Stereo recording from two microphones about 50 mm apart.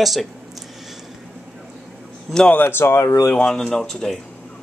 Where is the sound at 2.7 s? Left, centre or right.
Left.